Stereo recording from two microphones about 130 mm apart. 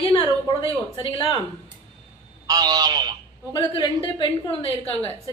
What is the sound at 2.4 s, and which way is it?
Speech, 30° right (ahead or behind).